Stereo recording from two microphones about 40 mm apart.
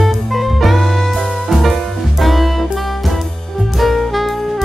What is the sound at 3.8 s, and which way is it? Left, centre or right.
Saxophone, centre.